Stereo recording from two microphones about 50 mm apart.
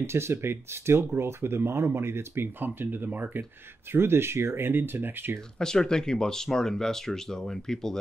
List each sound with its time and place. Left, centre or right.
0.0 s speech: right
3.9 s speech: right
5.6 s speech: centre